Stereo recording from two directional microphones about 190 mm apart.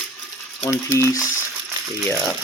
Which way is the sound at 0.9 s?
15° left (ahead or behind).